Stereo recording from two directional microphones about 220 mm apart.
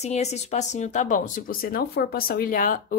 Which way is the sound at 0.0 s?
30° left (ahead or behind).